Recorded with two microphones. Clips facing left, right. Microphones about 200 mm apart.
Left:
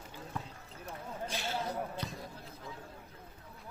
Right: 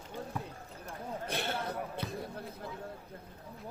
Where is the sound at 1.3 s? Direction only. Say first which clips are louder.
Right 1 dB; 60° right (ahead or behind).